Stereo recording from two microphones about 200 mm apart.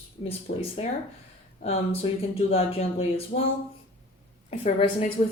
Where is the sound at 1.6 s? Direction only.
30° left (ahead or behind).